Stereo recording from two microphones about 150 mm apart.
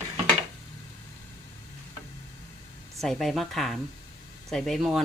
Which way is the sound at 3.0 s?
Centre (ahead or behind).